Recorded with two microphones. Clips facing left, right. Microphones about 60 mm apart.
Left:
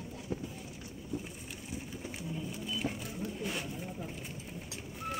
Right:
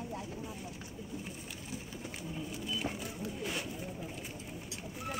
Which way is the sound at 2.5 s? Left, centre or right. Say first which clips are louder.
Even; centre.